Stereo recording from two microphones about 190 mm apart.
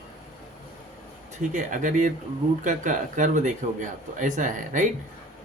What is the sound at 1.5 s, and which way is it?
Speech, 40° right (ahead or behind).